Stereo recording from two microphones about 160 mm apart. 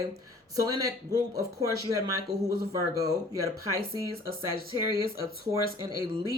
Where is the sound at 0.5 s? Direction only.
20° right (ahead or behind).